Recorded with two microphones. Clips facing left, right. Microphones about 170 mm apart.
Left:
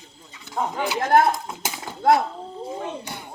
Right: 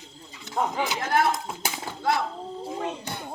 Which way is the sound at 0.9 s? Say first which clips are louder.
Left 9 dB; 50° left (ahead or behind).